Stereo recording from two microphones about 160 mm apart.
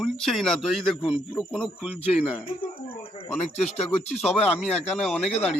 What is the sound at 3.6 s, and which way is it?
Speech, 45° left (ahead or behind).